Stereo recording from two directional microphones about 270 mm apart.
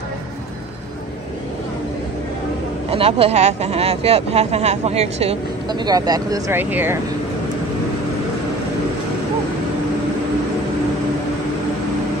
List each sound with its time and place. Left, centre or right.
2.9 s speech: right